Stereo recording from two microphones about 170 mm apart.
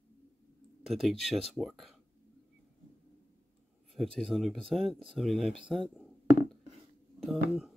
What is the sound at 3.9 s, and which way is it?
Speech, centre (ahead or behind).